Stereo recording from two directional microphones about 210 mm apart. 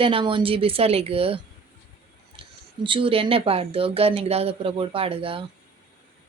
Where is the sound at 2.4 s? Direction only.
25° right (ahead or behind).